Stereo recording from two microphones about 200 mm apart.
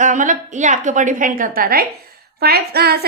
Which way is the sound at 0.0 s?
40° right (ahead or behind).